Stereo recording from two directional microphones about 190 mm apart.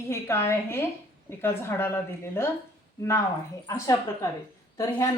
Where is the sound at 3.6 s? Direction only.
15° left (ahead or behind).